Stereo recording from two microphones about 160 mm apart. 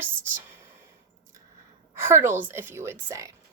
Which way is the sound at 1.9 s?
15° right (ahead or behind).